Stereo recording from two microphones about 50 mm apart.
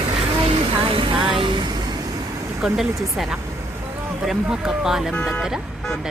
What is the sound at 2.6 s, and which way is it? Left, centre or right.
Speech, centre.